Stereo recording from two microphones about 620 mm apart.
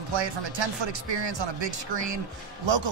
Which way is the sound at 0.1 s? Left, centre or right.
Right.